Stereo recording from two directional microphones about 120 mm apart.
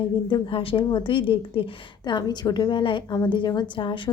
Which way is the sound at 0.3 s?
45° left (ahead or behind).